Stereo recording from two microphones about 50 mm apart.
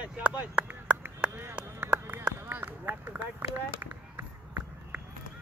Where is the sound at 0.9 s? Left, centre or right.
Right.